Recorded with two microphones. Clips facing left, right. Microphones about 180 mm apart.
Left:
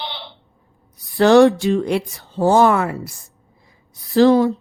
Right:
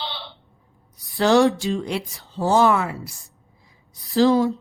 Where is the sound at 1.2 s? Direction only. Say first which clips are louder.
Left 6 dB; 60° left (ahead or behind).